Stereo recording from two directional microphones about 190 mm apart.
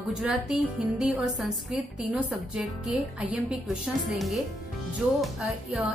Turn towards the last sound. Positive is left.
turn(degrees=0)  # may be behind; listen again after turning